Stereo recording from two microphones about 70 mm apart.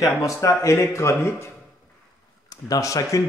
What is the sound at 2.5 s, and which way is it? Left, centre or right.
Speech, left.